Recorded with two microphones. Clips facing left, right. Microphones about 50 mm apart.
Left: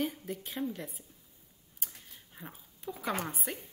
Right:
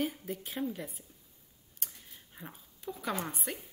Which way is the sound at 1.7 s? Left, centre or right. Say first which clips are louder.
Even; centre.